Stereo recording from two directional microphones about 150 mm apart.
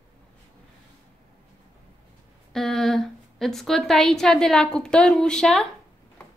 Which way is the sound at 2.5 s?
Centre (ahead or behind).